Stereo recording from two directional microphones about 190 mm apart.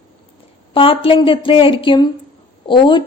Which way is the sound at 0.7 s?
25° left (ahead or behind).